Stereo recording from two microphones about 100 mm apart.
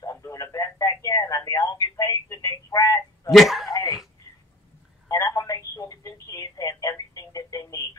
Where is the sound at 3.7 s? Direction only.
35° left (ahead or behind).